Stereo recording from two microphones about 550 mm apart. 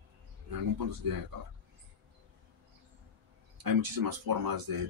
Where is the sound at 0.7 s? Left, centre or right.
Right.